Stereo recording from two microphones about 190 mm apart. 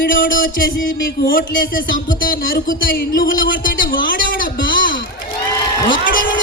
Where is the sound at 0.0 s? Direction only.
45° left (ahead or behind).